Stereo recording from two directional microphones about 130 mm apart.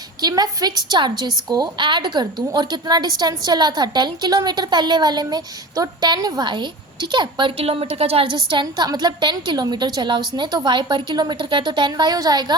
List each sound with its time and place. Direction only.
0.2 s a woman's voice: 30° right (ahead or behind)